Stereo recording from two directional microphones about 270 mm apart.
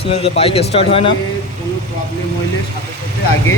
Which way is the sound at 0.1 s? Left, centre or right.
Left.